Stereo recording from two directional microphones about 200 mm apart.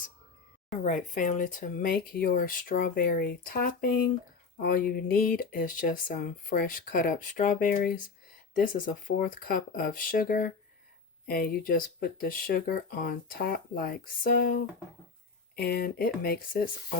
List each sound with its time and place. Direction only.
0.9 s speech: 40° left (ahead or behind)